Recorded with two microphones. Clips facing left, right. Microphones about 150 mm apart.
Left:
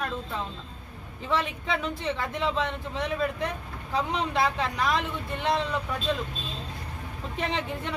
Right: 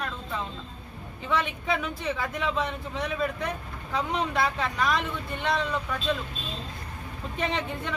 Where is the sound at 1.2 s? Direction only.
35° left (ahead or behind).